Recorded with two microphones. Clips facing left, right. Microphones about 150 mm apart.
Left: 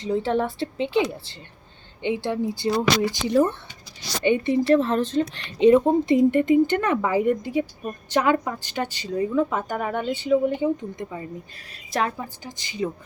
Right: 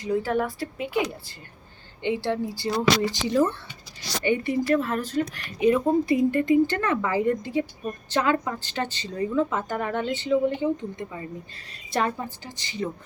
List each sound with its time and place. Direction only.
0.0 s a woman's voice: 25° left (ahead or behind)
11.9 s a woman's voice: centre (ahead or behind)
12.5 s a woman's voice: 15° left (ahead or behind)